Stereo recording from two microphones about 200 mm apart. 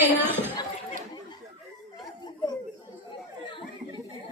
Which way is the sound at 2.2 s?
20° left (ahead or behind).